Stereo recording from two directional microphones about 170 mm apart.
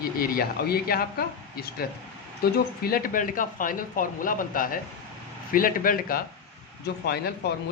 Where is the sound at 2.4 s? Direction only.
60° left (ahead or behind).